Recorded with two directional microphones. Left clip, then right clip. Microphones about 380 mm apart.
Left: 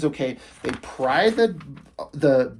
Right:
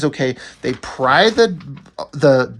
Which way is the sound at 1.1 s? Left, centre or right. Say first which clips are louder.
Right 7 dB; centre.